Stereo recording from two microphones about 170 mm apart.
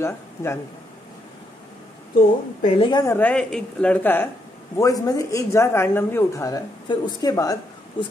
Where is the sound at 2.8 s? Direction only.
25° left (ahead or behind).